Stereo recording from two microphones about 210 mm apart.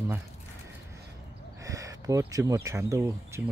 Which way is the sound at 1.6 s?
15° right (ahead or behind).